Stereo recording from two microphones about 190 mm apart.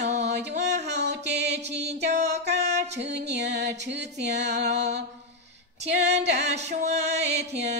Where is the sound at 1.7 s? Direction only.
35° right (ahead or behind).